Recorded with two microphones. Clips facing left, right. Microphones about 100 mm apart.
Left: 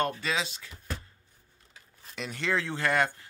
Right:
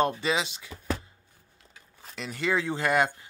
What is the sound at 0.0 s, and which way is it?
Speech, 20° right (ahead or behind).